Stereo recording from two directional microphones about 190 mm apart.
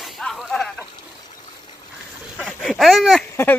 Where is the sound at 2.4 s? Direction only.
Centre (ahead or behind).